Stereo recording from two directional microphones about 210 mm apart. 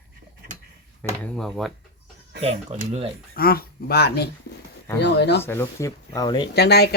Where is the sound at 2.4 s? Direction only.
30° right (ahead or behind).